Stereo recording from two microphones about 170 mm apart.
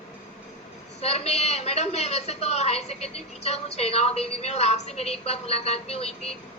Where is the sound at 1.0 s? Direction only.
40° left (ahead or behind).